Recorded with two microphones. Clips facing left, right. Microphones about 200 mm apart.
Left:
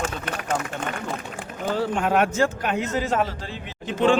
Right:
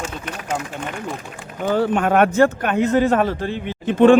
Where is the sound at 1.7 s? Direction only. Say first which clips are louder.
Right 5 dB; 60° right (ahead or behind).